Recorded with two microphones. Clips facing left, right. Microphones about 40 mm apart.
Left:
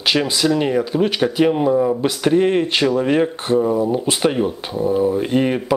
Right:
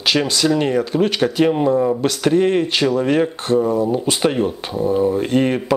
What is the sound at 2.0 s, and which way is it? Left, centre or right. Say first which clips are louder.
Speech: even; centre.